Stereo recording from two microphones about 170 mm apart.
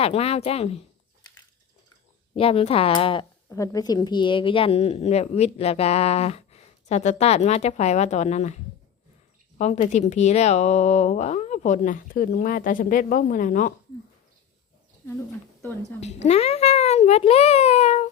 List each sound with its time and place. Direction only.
0.0 s speech: 35° left (ahead or behind)
2.3 s speech: 35° left (ahead or behind); by 13.7 s 55° left (ahead or behind)
16.0 s speech: 40° left (ahead or behind)